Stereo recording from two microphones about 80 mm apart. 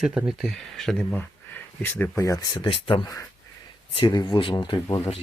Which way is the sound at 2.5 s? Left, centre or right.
Left.